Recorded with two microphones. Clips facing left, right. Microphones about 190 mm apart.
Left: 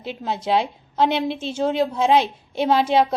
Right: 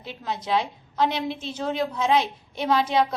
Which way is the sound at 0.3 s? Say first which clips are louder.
Left 4 dB; 30° left (ahead or behind).